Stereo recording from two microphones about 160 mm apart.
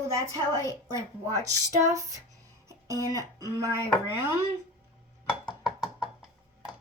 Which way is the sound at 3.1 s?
20° right (ahead or behind).